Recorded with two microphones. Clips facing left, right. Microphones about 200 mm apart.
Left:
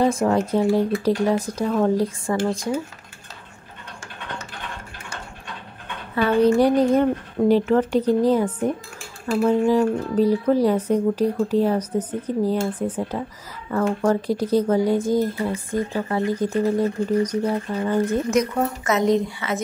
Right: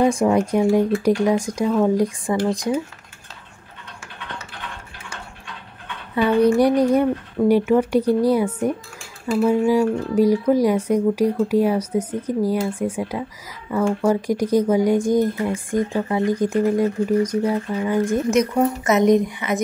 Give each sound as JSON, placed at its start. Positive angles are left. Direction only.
{"t": 0.0, "sound": "speech", "side_deg": -15}
{"t": 6.1, "sound": "speech", "side_deg": -15}